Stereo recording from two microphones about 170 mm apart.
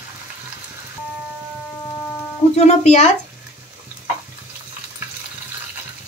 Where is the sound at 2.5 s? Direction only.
40° left (ahead or behind).